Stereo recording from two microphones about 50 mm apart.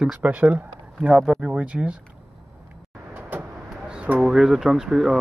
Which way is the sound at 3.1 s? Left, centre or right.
Right.